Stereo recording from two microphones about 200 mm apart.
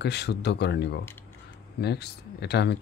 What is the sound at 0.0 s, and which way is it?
Speech, 55° left (ahead or behind).